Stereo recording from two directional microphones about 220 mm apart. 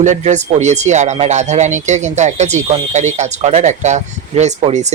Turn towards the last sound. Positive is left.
turn(degrees=-30)  # may be behind; listen again after turning